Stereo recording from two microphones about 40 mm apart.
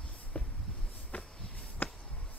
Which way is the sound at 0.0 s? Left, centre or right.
Left.